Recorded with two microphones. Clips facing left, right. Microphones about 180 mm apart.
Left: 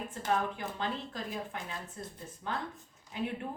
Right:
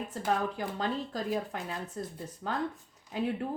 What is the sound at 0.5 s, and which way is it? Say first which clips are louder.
Speech: right 4 dB; 35° right (ahead or behind).